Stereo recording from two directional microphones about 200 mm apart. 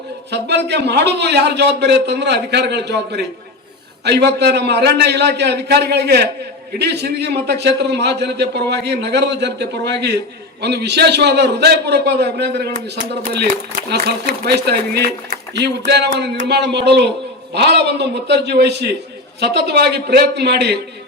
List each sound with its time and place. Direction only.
0.3 s speech: 55° right (ahead or behind)